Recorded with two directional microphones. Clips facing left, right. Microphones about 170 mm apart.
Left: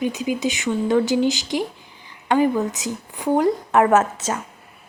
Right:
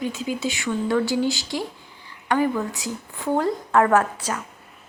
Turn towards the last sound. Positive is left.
turn(degrees=20)  # may be behind; listen again after turning